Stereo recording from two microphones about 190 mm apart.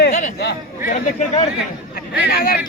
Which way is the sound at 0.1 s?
40° left (ahead or behind).